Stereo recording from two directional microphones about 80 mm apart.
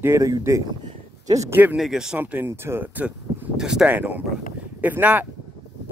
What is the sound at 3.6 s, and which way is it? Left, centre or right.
Speech, centre.